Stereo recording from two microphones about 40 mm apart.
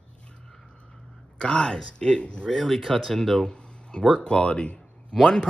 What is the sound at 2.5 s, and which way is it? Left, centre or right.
Speech, centre.